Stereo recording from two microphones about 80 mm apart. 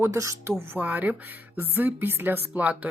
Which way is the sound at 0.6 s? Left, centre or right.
Right.